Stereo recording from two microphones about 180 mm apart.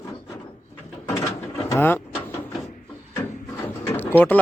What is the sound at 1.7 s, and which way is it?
Speech, 10° left (ahead or behind).